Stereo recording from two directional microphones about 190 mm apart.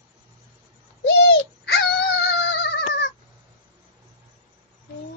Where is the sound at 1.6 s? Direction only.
65° left (ahead or behind).